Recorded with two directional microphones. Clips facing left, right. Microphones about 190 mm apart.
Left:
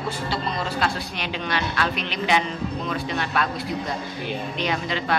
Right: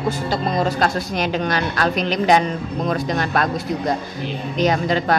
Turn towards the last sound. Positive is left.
turn(degrees=-45)  # may be behind; listen again after turning